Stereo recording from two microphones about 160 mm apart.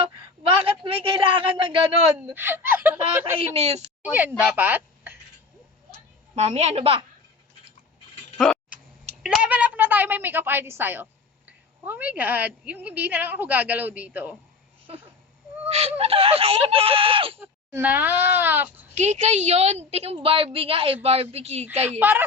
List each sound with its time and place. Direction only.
0.6 s speech: 35° right (ahead or behind)
2.3 s a woman's voice: 15° right (ahead or behind)
3.3 s speech: 35° right (ahead or behind)
4.0 s speech: 10° right (ahead or behind)
6.3 s speech: 45° right (ahead or behind)
9.2 s a woman's voice: 5° right (ahead or behind)
15.7 s speech: 40° right (ahead or behind)
17.4 s a woman's voice: 15° right (ahead or behind)
18.9 s a woman's voice: 45° right (ahead or behind)
21.8 s a woman's voice: 10° right (ahead or behind)